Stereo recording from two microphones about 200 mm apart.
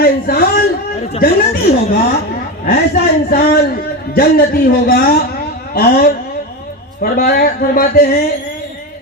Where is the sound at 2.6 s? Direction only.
50° left (ahead or behind).